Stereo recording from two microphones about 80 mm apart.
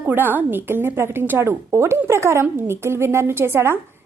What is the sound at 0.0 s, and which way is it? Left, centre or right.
A woman's voice, right.